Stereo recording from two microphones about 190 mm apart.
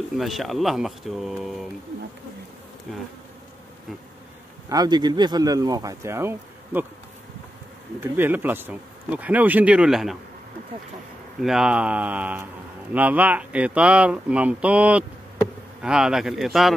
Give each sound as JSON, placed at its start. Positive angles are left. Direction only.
{"t": 0.2, "sound": "speech", "side_deg": 0}
{"t": 2.9, "sound": "speech", "side_deg": 0}
{"t": 4.6, "sound": "speech", "side_deg": -20}
{"t": 8.0, "sound": "speech", "side_deg": -10}
{"t": 11.4, "sound": "speech", "side_deg": -5}